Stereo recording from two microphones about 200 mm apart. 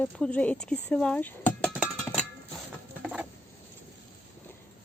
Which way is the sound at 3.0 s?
5° right (ahead or behind).